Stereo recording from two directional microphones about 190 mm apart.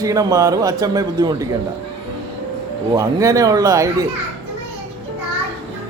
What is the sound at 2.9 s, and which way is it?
Speech, 20° right (ahead or behind).